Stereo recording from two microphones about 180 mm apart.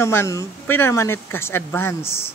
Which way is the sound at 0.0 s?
15° left (ahead or behind).